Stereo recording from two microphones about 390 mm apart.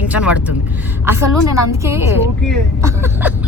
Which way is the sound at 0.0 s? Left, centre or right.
Centre.